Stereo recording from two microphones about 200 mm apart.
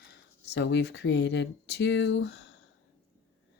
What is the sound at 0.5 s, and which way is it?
Speech, 60° left (ahead or behind).